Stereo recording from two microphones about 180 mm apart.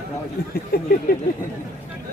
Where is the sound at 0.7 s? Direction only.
60° left (ahead or behind).